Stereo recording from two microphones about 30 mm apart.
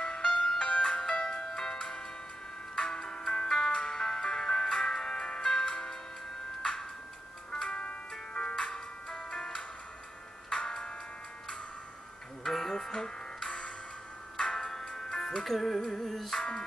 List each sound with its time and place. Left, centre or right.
0.0 s music: left
6.6 s tick-tock: left
7.7 s music: left
8.1 s music: left
12.4 s music: centre
14.3 s tick-tock: left
14.7 s music: centre
15.4 s music: centre
16.3 s music: left